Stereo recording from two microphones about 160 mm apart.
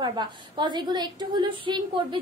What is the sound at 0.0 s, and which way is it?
A woman's voice, 25° right (ahead or behind).